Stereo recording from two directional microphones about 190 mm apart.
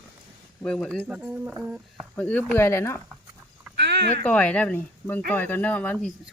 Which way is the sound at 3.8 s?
65° right (ahead or behind).